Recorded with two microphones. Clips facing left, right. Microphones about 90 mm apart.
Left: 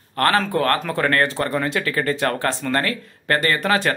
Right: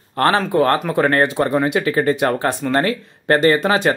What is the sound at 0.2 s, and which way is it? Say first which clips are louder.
Speech: right 3 dB; 20° right (ahead or behind).